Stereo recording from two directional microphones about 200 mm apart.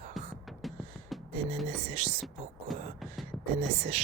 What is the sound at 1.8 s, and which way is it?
Speech, 30° right (ahead or behind).